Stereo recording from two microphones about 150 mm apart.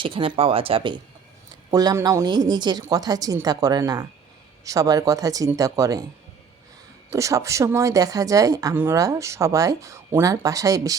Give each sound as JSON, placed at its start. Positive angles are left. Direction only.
{"t": 0.0, "sound": "a woman's voice", "side_deg": -35}
{"t": 7.1, "sound": "a woman's voice", "side_deg": -20}